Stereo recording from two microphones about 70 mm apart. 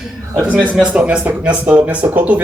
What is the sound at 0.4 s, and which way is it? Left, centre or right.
Speech, right.